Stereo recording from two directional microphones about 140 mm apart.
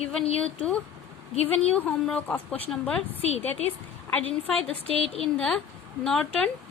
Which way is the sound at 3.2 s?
50° left (ahead or behind).